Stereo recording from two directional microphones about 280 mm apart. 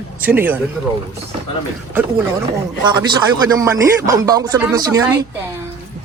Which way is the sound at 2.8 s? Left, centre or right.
Centre.